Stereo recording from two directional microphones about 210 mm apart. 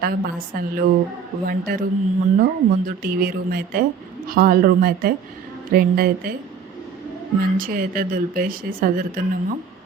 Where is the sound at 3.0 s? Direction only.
45° right (ahead or behind).